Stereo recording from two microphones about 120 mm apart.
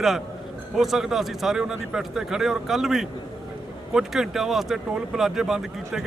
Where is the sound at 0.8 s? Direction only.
Centre (ahead or behind).